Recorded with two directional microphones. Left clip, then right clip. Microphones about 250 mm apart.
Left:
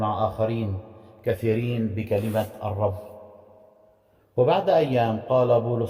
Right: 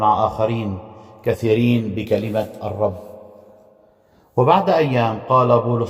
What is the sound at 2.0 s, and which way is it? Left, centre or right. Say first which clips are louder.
Speech: right 4 dB; right.